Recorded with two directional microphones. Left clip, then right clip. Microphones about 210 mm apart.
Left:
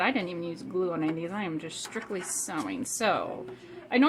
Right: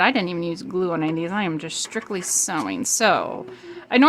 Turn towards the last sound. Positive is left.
turn(degrees=-45)  # may be behind; listen again after turning